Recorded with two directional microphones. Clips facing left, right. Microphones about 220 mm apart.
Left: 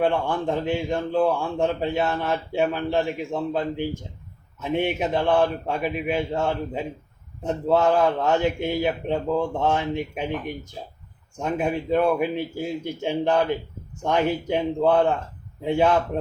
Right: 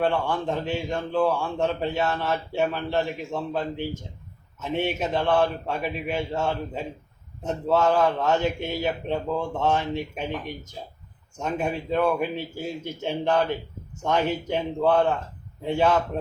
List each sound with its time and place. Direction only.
0.0 s a man's voice: 15° left (ahead or behind)